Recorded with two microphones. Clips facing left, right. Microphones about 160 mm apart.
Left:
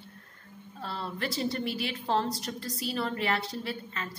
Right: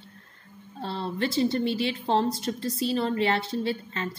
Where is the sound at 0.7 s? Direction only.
25° right (ahead or behind).